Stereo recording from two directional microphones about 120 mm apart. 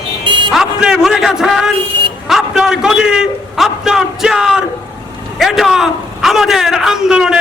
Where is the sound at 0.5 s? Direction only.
5° right (ahead or behind).